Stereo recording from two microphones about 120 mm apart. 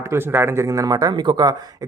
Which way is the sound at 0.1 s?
20° right (ahead or behind).